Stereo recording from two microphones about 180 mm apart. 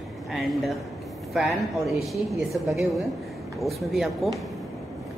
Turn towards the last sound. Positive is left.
turn(degrees=0)  # may be behind; listen again after turning